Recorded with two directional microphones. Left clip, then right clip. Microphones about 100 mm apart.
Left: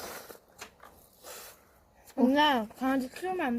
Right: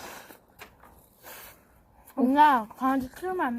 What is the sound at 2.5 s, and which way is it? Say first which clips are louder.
Speech: right 5 dB; 40° right (ahead or behind).